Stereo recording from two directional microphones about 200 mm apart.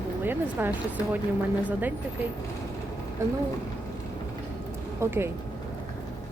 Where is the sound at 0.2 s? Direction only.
10° right (ahead or behind).